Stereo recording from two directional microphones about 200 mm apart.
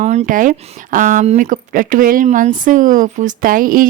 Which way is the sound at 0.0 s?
35° right (ahead or behind).